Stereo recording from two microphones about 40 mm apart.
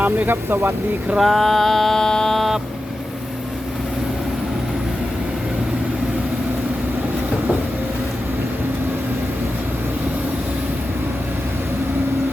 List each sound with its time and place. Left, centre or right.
0.3 s speech: right
1.2 s mantra: centre